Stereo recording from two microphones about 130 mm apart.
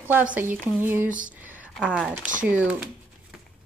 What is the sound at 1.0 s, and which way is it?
Speech, 85° right.